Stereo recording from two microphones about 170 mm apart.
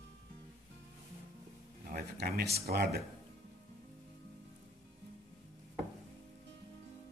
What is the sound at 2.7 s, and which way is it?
Speech, 65° right (ahead or behind).